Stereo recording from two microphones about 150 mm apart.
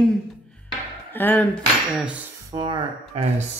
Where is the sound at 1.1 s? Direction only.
15° left (ahead or behind).